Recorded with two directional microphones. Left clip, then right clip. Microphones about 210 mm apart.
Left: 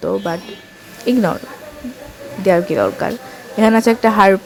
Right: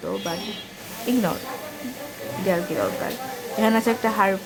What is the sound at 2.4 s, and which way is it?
Speech, 35° left (ahead or behind).